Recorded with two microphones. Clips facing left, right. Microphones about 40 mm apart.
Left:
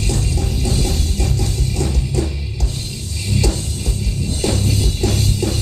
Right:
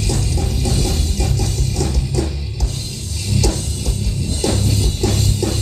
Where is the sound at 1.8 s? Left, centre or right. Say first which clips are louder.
Even; left.